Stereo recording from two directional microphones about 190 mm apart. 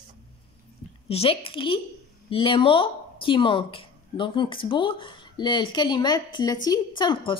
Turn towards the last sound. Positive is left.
turn(degrees=25)  # may be behind; listen again after turning